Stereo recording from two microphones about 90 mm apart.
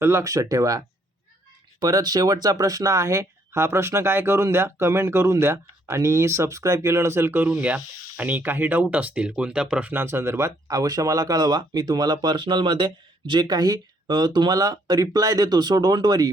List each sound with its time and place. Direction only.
0.0 s speech: 30° right (ahead or behind); by 9.9 s 10° right (ahead or behind)
9.9 s speech: 25° right (ahead or behind)
10.7 s speech: 45° right (ahead or behind)